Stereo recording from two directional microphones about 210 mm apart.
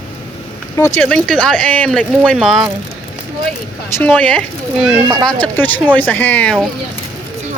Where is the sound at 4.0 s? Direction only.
5° left (ahead or behind).